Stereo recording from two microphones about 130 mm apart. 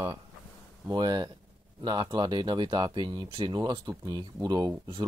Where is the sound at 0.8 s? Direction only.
30° right (ahead or behind).